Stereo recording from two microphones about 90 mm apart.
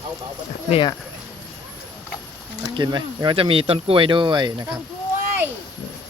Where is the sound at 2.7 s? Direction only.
60° right (ahead or behind).